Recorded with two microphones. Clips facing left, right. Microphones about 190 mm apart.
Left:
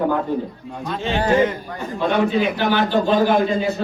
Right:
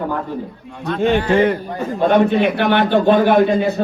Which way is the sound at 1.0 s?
55° right (ahead or behind).